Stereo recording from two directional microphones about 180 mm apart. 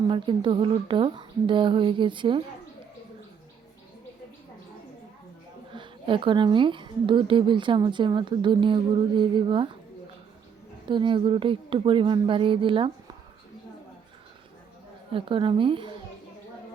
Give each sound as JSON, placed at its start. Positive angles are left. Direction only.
{"t": 0.1, "sound": "a woman's voice", "side_deg": -25}
{"t": 5.7, "sound": "a woman's voice", "side_deg": -25}
{"t": 10.8, "sound": "a woman's voice", "side_deg": -25}
{"t": 15.1, "sound": "a woman's voice", "side_deg": -30}